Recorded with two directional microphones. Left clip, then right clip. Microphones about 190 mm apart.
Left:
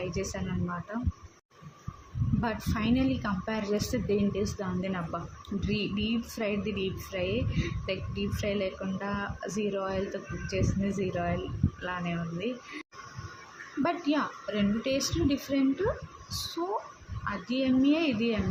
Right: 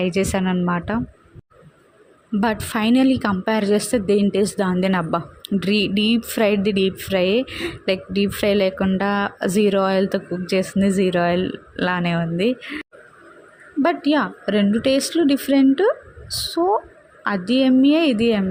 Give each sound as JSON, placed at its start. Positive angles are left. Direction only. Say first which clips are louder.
{"t": 0.1, "sound": "a woman's voice", "louder": "right 14 dB", "side_deg": -50}
{"t": 2.4, "sound": "a woman's voice", "louder": "right 12 dB", "side_deg": -45}
{"t": 13.8, "sound": "a woman's voice", "louder": "right 10 dB", "side_deg": -45}